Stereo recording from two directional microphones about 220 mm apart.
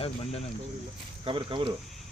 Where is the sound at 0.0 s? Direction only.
30° left (ahead or behind).